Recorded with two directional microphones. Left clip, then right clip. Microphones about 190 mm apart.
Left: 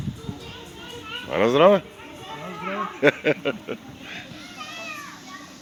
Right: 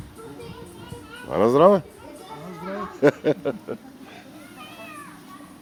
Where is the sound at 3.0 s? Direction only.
30° right (ahead or behind).